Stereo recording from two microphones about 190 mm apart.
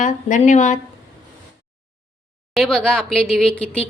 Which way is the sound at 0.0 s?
40° left (ahead or behind).